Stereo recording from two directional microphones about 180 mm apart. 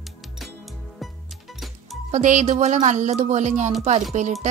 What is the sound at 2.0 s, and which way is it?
Speech, 45° right (ahead or behind).